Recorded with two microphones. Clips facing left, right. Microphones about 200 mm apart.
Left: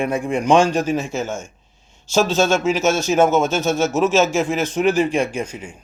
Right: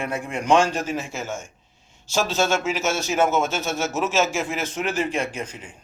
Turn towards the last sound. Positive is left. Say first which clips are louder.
# left 6 dB
turn(degrees=15)  # may be behind; listen again after turning